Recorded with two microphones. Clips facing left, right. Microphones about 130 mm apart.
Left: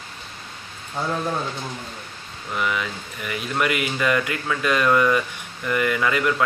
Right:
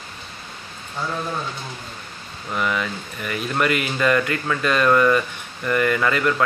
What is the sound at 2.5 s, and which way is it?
Speech, 10° left (ahead or behind).